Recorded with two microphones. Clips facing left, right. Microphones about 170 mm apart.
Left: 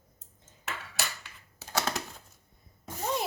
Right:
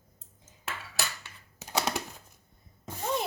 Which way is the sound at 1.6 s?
15° right (ahead or behind).